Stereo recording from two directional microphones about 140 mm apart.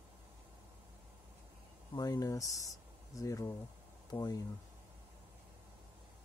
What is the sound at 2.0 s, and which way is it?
Speech, 25° left (ahead or behind).